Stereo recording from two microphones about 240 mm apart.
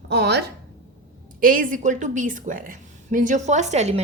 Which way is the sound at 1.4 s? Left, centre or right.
Right.